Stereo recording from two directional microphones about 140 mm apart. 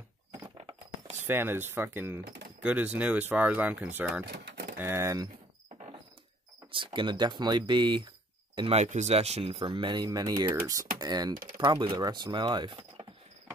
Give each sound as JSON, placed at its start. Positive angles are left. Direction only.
{"t": 1.2, "sound": "speech", "side_deg": -15}
{"t": 6.7, "sound": "speech", "side_deg": -35}
{"t": 8.5, "sound": "speech", "side_deg": -45}
{"t": 8.8, "sound": "speech", "side_deg": -55}